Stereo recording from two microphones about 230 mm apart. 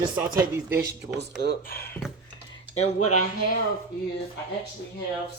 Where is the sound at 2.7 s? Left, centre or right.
Left.